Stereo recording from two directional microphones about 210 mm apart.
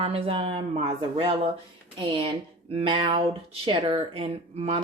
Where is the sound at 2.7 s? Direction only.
25° right (ahead or behind).